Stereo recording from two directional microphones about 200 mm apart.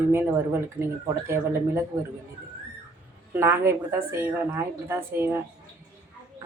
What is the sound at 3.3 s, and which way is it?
A woman's voice, 10° right (ahead or behind).